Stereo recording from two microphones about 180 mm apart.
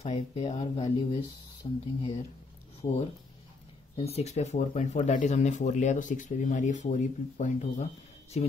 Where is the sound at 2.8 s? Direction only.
35° left (ahead or behind).